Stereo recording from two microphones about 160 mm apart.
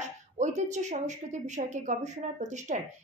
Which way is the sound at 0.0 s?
45° right (ahead or behind).